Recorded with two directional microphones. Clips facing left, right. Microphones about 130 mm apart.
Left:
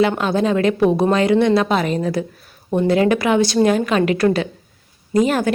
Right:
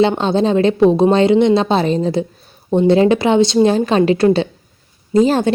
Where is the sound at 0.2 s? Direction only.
25° right (ahead or behind).